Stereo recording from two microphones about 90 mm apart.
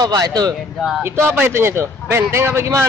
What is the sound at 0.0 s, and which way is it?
Speech, 45° right (ahead or behind).